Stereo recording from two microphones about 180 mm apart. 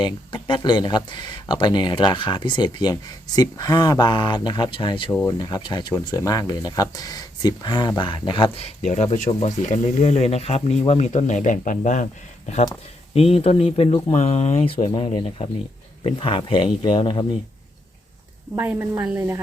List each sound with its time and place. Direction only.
0.0 s speech: 25° left (ahead or behind)
8.9 s speech: 45° left (ahead or behind)
13.1 s speech: 35° left (ahead or behind)
18.5 s a woman's voice: 10° right (ahead or behind)